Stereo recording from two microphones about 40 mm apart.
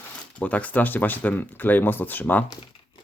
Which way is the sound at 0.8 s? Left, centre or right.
Left.